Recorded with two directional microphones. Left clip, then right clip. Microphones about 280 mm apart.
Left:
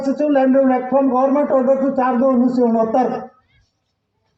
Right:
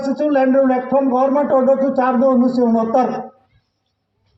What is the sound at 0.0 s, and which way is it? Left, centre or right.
A man's voice, right.